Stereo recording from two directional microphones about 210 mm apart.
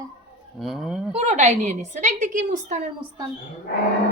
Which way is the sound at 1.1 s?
30° right (ahead or behind).